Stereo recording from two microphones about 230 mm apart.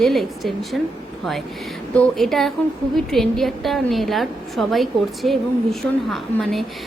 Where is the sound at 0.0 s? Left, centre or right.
Centre.